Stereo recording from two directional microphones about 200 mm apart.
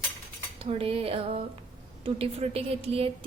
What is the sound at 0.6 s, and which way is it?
Speech, 30° right (ahead or behind).